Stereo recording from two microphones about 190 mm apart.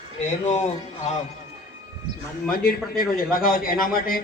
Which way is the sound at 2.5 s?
50° left (ahead or behind).